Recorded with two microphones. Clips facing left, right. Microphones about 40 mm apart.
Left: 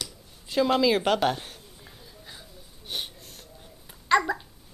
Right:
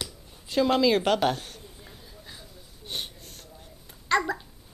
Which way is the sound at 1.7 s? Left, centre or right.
Centre.